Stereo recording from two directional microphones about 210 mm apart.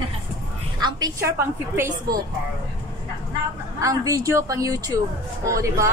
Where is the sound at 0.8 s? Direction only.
20° right (ahead or behind).